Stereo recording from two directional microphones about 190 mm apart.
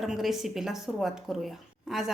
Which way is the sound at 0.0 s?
Centre (ahead or behind).